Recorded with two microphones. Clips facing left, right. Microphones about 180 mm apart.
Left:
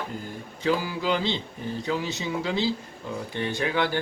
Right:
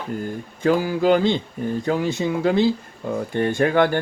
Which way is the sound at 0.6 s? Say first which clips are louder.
Right 8 dB; 50° right (ahead or behind).